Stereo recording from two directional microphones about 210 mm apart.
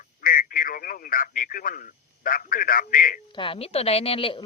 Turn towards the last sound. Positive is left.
turn(degrees=25)  # may be behind; listen again after turning